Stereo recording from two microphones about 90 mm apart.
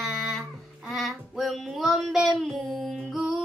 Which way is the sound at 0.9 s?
Centre (ahead or behind).